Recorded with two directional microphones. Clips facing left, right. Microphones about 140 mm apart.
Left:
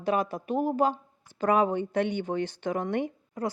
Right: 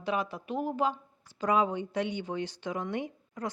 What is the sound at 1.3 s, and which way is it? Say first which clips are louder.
Speech: left 3 dB; 55° left (ahead or behind).